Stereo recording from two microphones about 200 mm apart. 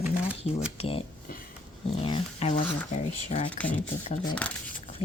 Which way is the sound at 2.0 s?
30° left (ahead or behind).